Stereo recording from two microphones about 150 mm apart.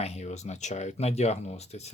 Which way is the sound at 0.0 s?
45° left (ahead or behind).